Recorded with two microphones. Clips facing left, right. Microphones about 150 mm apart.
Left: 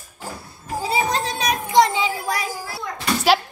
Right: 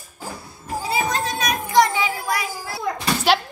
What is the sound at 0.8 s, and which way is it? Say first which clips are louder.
Music: left 1 dB; 30° left (ahead or behind).